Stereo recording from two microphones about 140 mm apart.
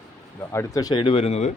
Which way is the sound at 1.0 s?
40° left (ahead or behind).